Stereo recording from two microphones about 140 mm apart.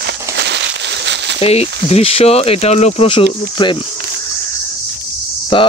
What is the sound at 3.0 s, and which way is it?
Speech, 35° left (ahead or behind).